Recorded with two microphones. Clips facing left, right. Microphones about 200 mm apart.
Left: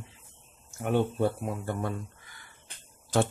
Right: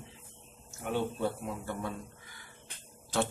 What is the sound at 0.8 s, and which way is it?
A man's voice, 55° left (ahead or behind).